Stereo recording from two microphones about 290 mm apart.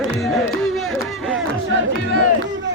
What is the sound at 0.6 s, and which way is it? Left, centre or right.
Crowd, centre.